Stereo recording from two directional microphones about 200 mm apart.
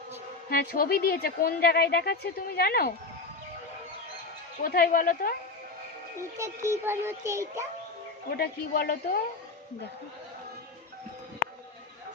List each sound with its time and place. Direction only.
0.5 s speech: 50° left (ahead or behind)
4.6 s speech: 45° left (ahead or behind)
6.3 s a child's voice: 15° right (ahead or behind)
8.3 s speech: 50° left (ahead or behind)